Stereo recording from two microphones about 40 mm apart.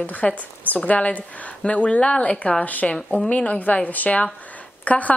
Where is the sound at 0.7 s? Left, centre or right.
Left.